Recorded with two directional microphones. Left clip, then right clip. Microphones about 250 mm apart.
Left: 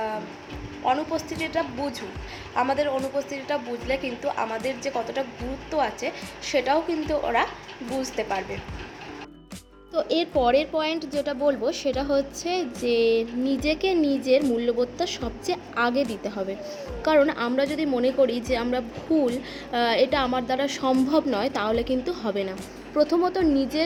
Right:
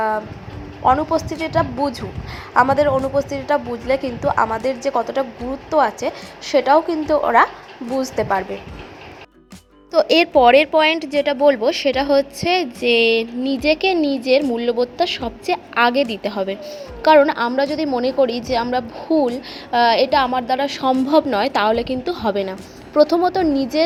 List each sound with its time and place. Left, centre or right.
0.9 s a woman's voice: centre
9.9 s a woman's voice: right